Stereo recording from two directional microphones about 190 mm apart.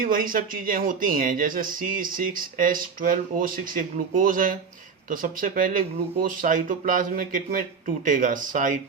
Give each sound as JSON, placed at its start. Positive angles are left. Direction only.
{"t": 0.0, "sound": "speech", "side_deg": -45}